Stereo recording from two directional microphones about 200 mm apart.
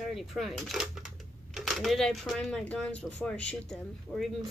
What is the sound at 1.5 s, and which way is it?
Speech, centre (ahead or behind).